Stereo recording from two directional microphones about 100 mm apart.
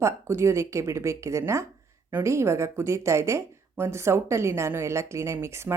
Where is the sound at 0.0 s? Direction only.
25° right (ahead or behind).